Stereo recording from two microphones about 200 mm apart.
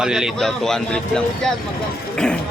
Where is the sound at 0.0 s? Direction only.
Centre (ahead or behind).